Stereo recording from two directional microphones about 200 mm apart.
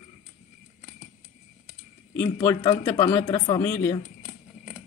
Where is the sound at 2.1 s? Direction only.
15° left (ahead or behind).